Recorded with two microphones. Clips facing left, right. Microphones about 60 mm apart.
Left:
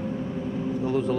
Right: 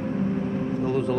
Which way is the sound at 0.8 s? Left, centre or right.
Right.